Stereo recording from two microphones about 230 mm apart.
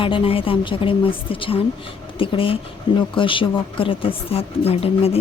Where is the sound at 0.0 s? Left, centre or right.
Left.